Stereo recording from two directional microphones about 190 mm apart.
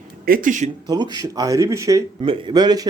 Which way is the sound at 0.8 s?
20° right (ahead or behind).